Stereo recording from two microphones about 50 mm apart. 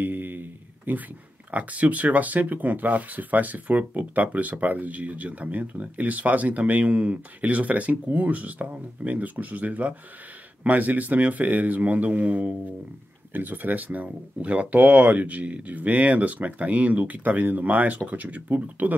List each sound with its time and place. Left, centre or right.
0.0 s a sound: right
1.5 s speech: right
13.3 s speech: right